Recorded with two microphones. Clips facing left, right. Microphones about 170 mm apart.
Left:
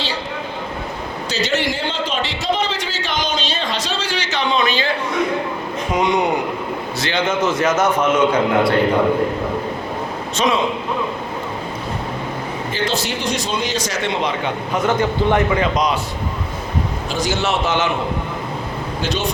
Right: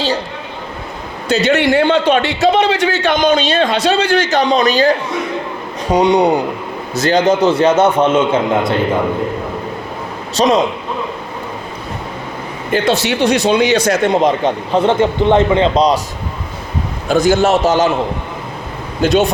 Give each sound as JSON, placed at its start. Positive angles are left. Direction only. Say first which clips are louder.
{"t": 1.3, "sound": "a man's voice", "louder": "right 9 dB", "side_deg": -60}
{"t": 10.3, "sound": "a man's voice", "louder": "right 6 dB", "side_deg": -35}
{"t": 12.7, "sound": "a man's voice", "louder": "right 9 dB", "side_deg": -70}
{"t": 14.7, "sound": "a man's voice", "louder": "right 5 dB", "side_deg": -30}
{"t": 17.1, "sound": "a man's voice", "louder": "right 11 dB", "side_deg": -55}